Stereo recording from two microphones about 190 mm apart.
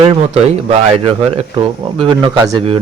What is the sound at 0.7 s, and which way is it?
Speech, 30° right (ahead or behind).